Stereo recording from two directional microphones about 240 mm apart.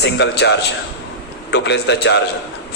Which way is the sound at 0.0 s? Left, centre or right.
Left.